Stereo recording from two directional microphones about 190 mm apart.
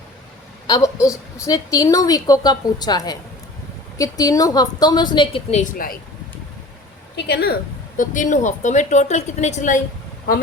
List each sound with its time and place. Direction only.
0.7 s a woman's voice: 15° left (ahead or behind)
5.7 s speech: 50° left (ahead or behind)
7.2 s a woman's voice: 60° left (ahead or behind)
7.9 s a woman's voice: 40° left (ahead or behind)